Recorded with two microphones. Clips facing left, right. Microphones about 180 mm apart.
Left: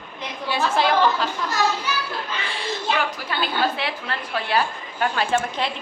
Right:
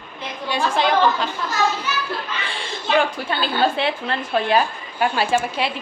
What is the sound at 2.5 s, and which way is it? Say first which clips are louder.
A woman's voice: right 3 dB; 30° right (ahead or behind).